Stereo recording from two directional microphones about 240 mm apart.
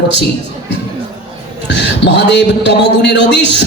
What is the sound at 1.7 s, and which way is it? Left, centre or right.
A man's voice, left.